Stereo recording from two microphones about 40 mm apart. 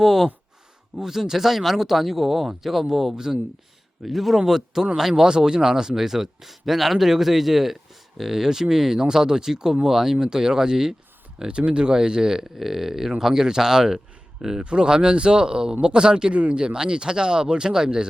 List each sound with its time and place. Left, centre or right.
0.0 s a man's voice: centre